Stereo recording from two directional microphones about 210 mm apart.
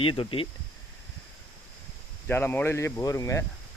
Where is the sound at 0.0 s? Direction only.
25° left (ahead or behind).